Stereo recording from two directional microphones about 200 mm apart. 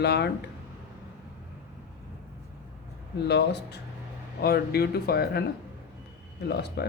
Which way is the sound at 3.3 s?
55° left (ahead or behind).